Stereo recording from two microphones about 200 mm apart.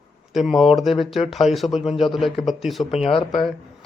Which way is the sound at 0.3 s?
Centre (ahead or behind).